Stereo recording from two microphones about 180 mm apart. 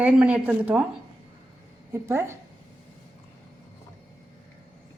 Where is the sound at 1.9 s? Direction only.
15° right (ahead or behind).